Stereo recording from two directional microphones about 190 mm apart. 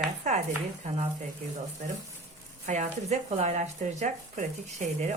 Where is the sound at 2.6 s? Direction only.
40° right (ahead or behind).